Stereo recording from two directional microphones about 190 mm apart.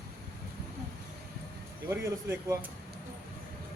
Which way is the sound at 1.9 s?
15° right (ahead or behind).